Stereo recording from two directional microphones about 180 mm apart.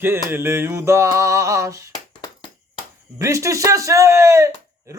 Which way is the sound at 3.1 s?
15° right (ahead or behind).